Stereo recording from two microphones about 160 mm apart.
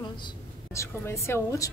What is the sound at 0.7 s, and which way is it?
A woman's voice, 15° left (ahead or behind).